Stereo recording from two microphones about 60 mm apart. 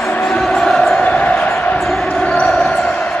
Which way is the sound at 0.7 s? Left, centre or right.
Centre.